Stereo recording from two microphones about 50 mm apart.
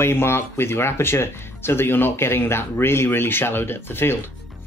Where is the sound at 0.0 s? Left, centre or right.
Left.